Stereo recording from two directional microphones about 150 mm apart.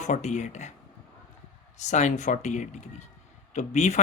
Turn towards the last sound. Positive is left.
turn(degrees=50)  # may be behind; listen again after turning